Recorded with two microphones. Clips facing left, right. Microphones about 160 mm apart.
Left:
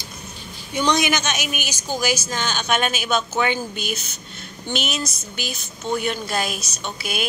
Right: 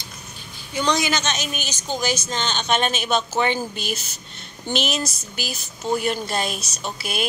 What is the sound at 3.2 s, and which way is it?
Speech, 30° right (ahead or behind).